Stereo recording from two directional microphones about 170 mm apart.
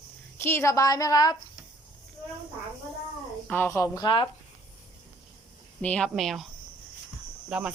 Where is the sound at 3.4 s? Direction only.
10° left (ahead or behind); by 4.3 s 30° left (ahead or behind).